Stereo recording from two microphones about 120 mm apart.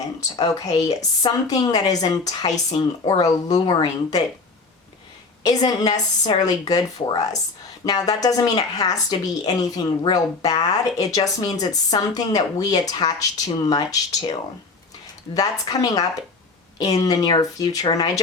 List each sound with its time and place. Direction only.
0.2 s a woman's voice: 30° left (ahead or behind)
5.4 s a woman's voice: 35° left (ahead or behind)
15.4 s a woman's voice: 30° left (ahead or behind)